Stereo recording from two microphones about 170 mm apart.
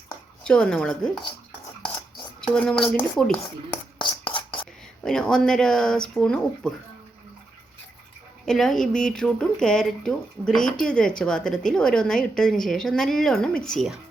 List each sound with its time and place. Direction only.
0.4 s speech: 5° left (ahead or behind)
2.5 s speech: 5° left (ahead or behind)
3.9 s a sound: 30° left (ahead or behind)
5.0 s speech: 5° left (ahead or behind)
8.4 s speech: 5° left (ahead or behind)